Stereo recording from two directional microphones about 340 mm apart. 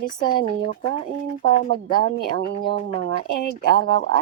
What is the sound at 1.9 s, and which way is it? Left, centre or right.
Speech, centre.